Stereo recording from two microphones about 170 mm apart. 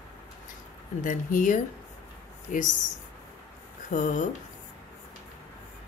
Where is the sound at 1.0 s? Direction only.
50° left (ahead or behind).